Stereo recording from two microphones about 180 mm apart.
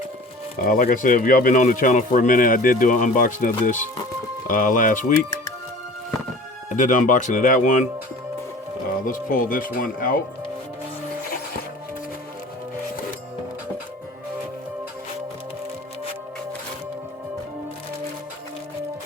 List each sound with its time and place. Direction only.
0.6 s speech: 50° left (ahead or behind)
6.7 s speech: 45° left (ahead or behind)
9.0 s speech: 50° left (ahead or behind)